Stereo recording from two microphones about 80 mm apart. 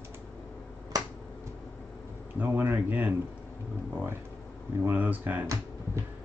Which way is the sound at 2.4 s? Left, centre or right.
Right.